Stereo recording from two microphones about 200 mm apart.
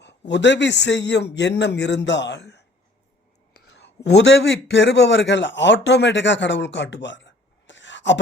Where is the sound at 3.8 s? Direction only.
60° left (ahead or behind).